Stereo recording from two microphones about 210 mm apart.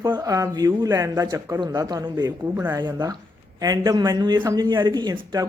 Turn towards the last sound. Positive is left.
turn(degrees=-20)  # may be behind; listen again after turning